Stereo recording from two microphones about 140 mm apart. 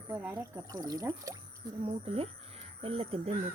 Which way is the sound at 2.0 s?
45° right (ahead or behind).